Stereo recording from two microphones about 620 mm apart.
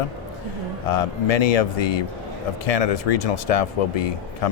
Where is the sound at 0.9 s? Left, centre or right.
Left.